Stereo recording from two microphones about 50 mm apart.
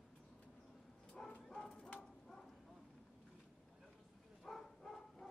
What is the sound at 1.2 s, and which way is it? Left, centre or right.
Bow-wow, centre.